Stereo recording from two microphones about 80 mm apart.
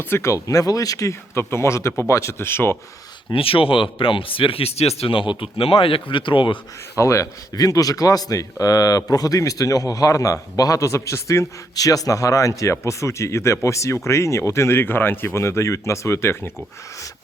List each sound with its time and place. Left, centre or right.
0.0 s speech: left
0.3 s speech: left
1.4 s speech: left
3.2 s speech: left
6.9 s speech: left
7.5 s speech: left
11.7 s speech: left